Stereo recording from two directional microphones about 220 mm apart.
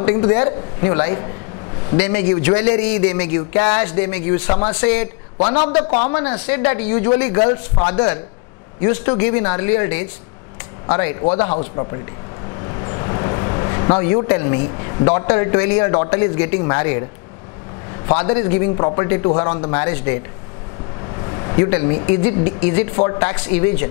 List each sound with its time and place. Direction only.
0.0 s a man's voice: 20° left (ahead or behind)
5.5 s a man's voice: 30° left (ahead or behind)
6.4 s a man's voice: 15° left (ahead or behind)
12.6 s a sound: 20° left (ahead or behind)
15.0 s a man's voice: 20° left (ahead or behind)
18.0 s a man's voice: 25° left (ahead or behind)